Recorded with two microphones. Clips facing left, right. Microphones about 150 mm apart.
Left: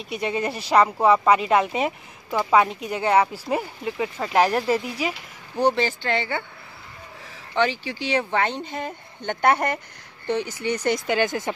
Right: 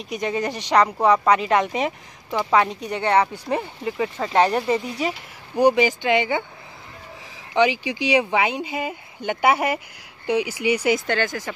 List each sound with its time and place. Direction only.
0.4 s a woman's voice: 5° left (ahead or behind)
5.6 s speech: 10° right (ahead or behind)
7.5 s speech: 15° right (ahead or behind)
11.1 s speech: 15° left (ahead or behind)